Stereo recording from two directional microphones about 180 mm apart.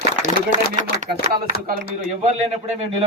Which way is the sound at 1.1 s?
60° right (ahead or behind).